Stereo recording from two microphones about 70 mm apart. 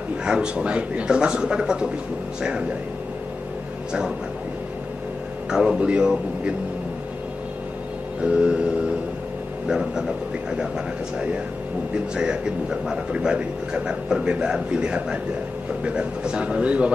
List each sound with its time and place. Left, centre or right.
0.2 s speech: centre
5.5 s speech: centre
8.2 s speech: centre
11.9 s speech: centre